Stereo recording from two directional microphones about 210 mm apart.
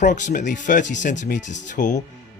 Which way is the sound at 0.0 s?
35° left (ahead or behind).